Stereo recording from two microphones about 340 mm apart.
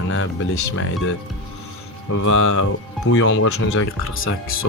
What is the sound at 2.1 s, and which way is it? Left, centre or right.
Speech, left.